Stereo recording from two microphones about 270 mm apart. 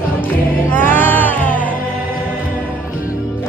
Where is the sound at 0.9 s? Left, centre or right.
Centre.